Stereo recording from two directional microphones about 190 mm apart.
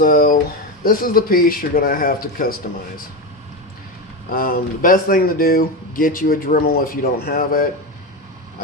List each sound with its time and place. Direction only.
0.0 s speech: 50° left (ahead or behind)
4.3 s speech: 50° left (ahead or behind)